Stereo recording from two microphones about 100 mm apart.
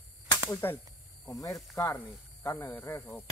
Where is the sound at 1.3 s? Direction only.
35° left (ahead or behind).